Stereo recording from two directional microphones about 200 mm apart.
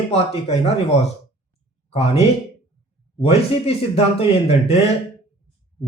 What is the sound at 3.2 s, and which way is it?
Speech, 30° left (ahead or behind).